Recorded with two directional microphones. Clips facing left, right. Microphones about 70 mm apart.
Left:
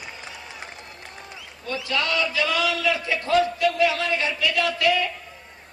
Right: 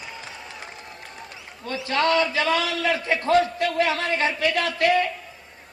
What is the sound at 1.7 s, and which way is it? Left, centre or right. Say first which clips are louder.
A man's voice: right 4 dB; right.